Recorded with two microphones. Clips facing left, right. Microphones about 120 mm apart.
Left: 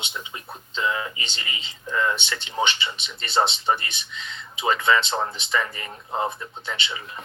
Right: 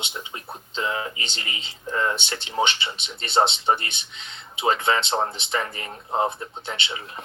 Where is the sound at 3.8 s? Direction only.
60° right (ahead or behind).